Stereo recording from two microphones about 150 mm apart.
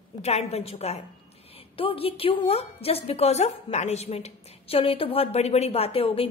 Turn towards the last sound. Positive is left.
turn(degrees=40)  # may be behind; listen again after turning